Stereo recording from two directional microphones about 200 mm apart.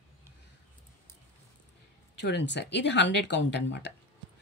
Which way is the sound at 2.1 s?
60° left (ahead or behind).